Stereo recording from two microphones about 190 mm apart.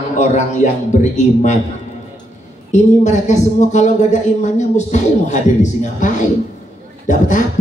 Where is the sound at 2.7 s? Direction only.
40° left (ahead or behind).